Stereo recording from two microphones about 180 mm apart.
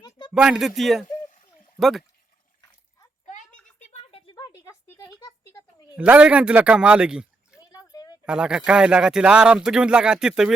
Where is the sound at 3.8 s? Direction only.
35° left (ahead or behind); by 5.3 s 15° left (ahead or behind).